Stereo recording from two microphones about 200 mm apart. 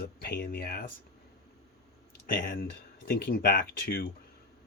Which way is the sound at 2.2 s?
45° left (ahead or behind).